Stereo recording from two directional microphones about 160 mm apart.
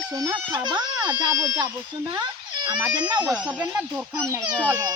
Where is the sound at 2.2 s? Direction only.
30° right (ahead or behind).